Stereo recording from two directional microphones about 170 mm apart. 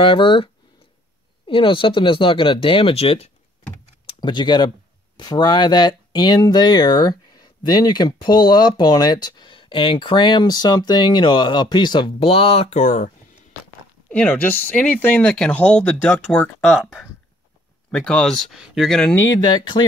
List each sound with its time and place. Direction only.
0.0 s speech: 30° left (ahead or behind)
1.5 s speech: 30° left (ahead or behind); by 13.1 s 45° left (ahead or behind)
14.1 s speech: 10° left (ahead or behind)
19.1 s speech: 20° left (ahead or behind)